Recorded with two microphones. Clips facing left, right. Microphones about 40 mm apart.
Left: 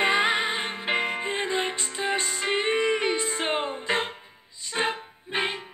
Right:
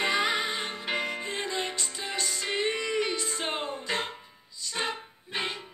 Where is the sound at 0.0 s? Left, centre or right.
Left.